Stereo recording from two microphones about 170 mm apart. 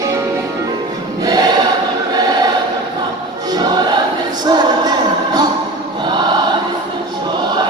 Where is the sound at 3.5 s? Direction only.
25° right (ahead or behind).